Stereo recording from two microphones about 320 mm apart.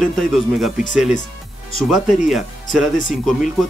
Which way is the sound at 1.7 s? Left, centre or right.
Left.